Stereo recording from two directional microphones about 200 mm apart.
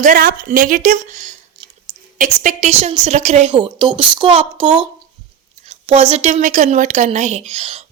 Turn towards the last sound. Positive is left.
turn(degrees=-30)  # may be behind; listen again after turning